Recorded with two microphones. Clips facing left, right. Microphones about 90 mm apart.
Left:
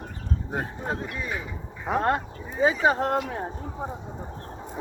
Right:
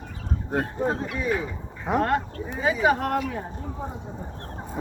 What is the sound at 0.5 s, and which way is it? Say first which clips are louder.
Speech: right 5 dB; centre (ahead or behind).